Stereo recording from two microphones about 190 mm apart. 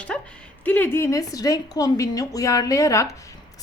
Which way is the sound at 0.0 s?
5° left (ahead or behind).